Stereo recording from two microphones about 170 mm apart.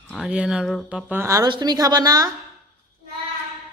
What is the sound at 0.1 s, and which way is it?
A woman's voice, 5° right (ahead or behind).